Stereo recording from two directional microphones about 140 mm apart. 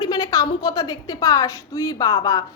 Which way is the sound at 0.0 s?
25° left (ahead or behind).